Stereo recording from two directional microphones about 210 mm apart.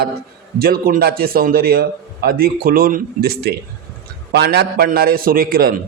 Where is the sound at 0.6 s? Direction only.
45° right (ahead or behind).